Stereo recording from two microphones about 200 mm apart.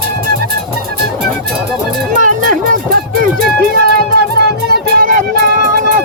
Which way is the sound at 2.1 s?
40° right (ahead or behind).